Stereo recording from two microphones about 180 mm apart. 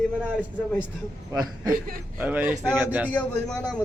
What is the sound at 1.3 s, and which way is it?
Speech, 20° right (ahead or behind).